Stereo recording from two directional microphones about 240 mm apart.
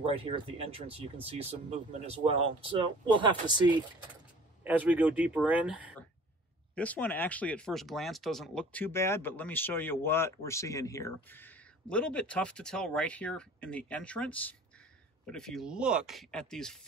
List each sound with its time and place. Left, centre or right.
0.0 s speech: right
4.6 s speech: centre
6.7 s speech: centre